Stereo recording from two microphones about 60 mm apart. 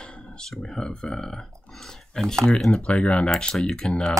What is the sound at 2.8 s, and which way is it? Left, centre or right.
Speech, left.